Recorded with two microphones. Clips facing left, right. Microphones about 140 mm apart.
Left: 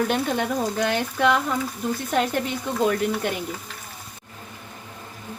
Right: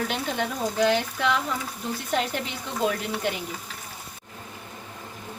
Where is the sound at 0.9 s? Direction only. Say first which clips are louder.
Left 4 dB; 55° left (ahead or behind).